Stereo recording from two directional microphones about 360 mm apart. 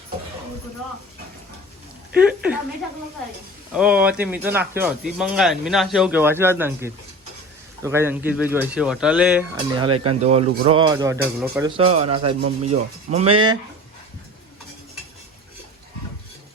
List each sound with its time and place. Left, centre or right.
2.1 s speech: centre
3.8 s speech: centre
10.1 s speech: centre
11.8 s speech: centre
12.4 s speech: right
12.7 s speech: centre